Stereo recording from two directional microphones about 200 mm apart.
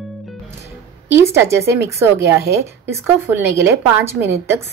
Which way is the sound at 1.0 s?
10° right (ahead or behind).